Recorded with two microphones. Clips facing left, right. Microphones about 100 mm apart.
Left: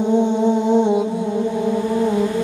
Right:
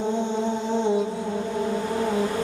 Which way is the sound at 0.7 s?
15° left (ahead or behind).